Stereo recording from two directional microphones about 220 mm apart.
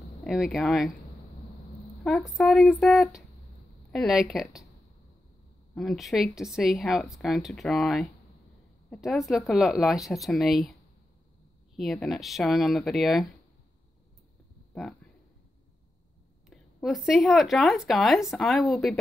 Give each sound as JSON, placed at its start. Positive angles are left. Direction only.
{"t": 0.2, "sound": "speech", "side_deg": 0}
{"t": 2.0, "sound": "speech", "side_deg": 0}
{"t": 5.8, "sound": "speech", "side_deg": 0}
{"t": 14.7, "sound": "a sound", "side_deg": 5}
{"t": 16.4, "sound": "speech", "side_deg": 0}